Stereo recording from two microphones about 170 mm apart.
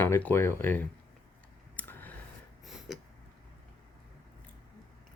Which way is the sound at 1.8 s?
10° left (ahead or behind).